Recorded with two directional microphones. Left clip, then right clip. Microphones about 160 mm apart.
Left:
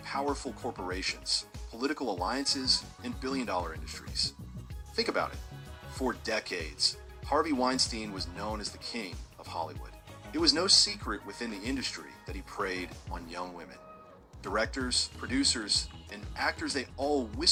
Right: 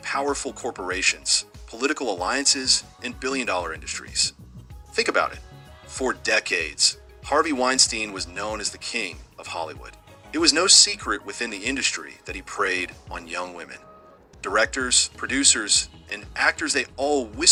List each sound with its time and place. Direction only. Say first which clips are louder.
0.0 s speech: right 8 dB; 20° right (ahead or behind)